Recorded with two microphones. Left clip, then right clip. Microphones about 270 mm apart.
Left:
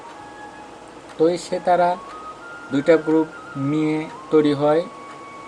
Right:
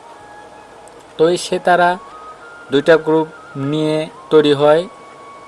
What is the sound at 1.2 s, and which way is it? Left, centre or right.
Speech, right.